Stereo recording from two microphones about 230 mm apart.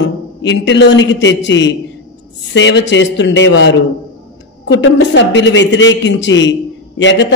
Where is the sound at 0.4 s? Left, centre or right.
Left.